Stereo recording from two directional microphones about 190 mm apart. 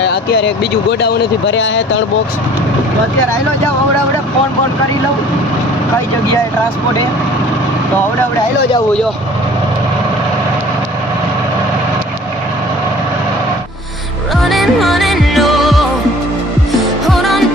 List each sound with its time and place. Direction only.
0.0 s speech: 60° left (ahead or behind)
14.5 s music: centre (ahead or behind)
17.1 s music: centre (ahead or behind)